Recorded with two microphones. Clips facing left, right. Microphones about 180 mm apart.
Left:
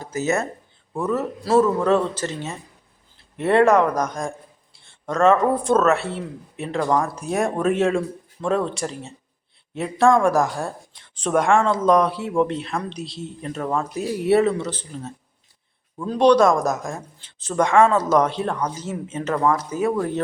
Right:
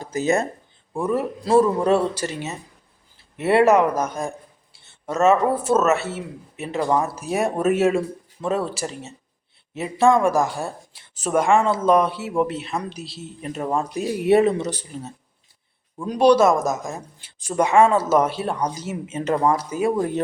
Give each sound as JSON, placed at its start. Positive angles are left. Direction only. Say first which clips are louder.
{"t": 0.0, "sound": "speech", "louder": "right 2 dB", "side_deg": -15}
{"t": 13.4, "sound": "speech", "louder": "right 1 dB", "side_deg": -15}
{"t": 19.3, "sound": "speech", "louder": "right 1 dB", "side_deg": -25}
{"t": 19.5, "sound": "speech", "louder": "right 1 dB", "side_deg": -10}